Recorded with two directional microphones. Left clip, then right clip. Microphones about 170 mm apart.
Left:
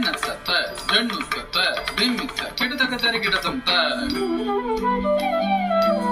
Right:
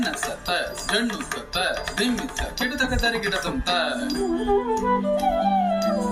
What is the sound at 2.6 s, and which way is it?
Speech, 70° right (ahead or behind).